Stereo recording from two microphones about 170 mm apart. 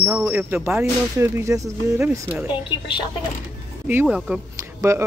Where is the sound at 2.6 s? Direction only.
30° left (ahead or behind).